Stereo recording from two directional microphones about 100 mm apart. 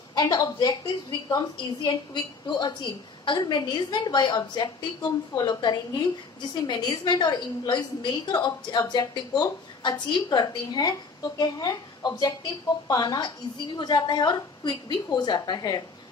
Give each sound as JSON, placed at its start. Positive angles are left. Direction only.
{"t": 0.1, "sound": "a woman's voice", "side_deg": 40}